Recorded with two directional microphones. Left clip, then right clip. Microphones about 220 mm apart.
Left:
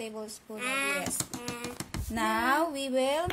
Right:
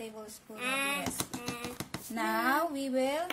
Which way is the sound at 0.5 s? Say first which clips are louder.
Left 2 dB; 5° left (ahead or behind).